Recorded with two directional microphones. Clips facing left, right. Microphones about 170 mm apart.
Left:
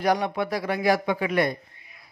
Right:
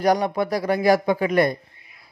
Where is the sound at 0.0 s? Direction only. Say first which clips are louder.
Right 4 dB; 40° right (ahead or behind).